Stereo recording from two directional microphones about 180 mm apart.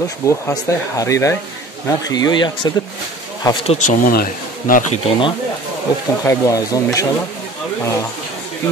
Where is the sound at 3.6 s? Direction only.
40° left (ahead or behind).